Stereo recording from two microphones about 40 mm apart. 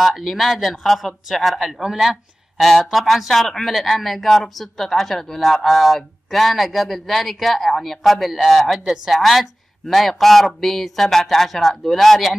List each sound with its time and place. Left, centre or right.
0.0 s a man's voice: centre
2.5 s a man's voice: centre
9.2 s a man's voice: centre